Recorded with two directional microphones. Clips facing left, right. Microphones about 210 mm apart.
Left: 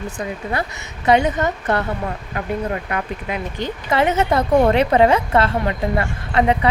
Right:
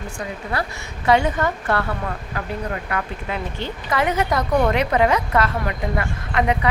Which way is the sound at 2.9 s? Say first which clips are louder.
Left 2 dB; 15° left (ahead or behind).